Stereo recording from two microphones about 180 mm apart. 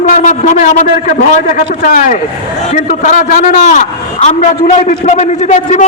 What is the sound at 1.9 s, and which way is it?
A man's voice, 45° left (ahead or behind).